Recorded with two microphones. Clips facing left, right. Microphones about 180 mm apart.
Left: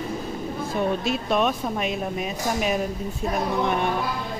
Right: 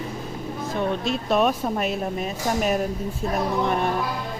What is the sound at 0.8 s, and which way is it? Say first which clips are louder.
Speech: left 1 dB; centre (ahead or behind).